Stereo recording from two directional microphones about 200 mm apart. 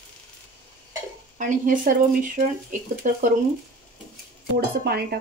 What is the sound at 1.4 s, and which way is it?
Speech, 40° right (ahead or behind).